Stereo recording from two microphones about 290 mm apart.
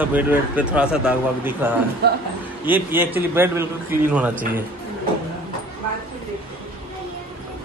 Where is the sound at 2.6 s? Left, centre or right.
Centre.